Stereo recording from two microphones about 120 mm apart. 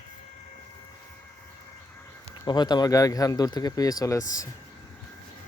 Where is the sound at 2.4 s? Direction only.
40° left (ahead or behind).